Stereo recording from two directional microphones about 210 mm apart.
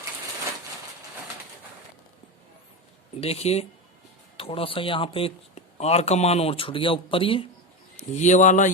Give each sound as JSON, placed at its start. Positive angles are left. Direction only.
{"t": 3.2, "sound": "speech", "side_deg": 30}